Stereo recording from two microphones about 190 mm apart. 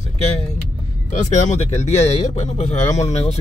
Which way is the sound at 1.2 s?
40° left (ahead or behind).